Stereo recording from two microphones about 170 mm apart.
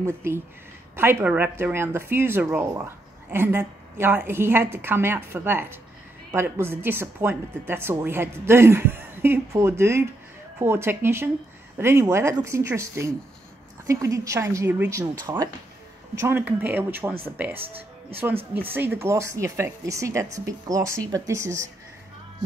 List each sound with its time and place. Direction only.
0.9 s speech: 10° right (ahead or behind)